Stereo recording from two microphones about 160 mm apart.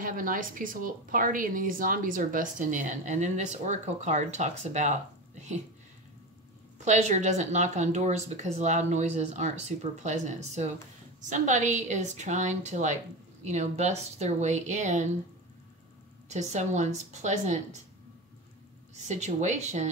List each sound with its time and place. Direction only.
0.0 s a woman's voice: 60° right (ahead or behind)
6.8 s speech: 45° right (ahead or behind)
16.3 s speech: 45° right (ahead or behind)
19.0 s speech: 45° right (ahead or behind)